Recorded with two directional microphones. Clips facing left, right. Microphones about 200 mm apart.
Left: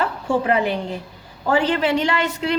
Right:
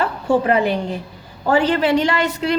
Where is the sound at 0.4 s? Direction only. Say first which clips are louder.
Right 3 dB; 45° right (ahead or behind).